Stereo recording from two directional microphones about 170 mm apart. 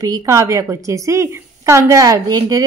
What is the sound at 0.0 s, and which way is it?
A woman's voice, 20° right (ahead or behind).